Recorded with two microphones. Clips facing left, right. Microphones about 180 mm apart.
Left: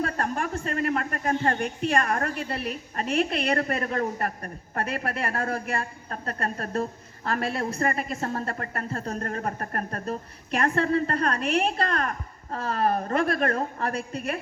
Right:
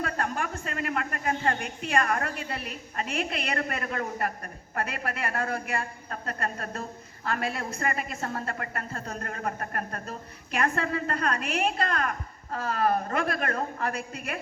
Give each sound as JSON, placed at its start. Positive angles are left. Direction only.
{"t": 0.0, "sound": "a woman's voice", "side_deg": 35}